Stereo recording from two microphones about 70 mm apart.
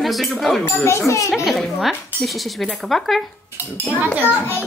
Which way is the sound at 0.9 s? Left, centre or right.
Left.